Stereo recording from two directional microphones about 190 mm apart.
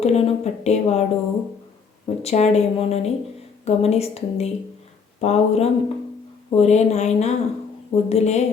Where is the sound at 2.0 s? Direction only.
35° left (ahead or behind).